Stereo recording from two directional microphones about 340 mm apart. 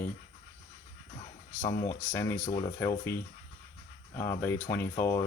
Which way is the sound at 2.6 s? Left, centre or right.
Centre.